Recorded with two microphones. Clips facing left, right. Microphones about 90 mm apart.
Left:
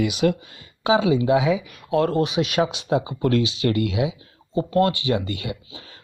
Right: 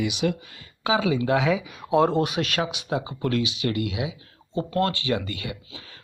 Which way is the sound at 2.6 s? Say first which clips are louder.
Left 6 dB; 30° left (ahead or behind).